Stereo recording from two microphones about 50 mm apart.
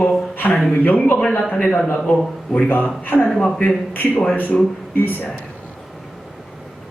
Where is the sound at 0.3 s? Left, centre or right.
Left.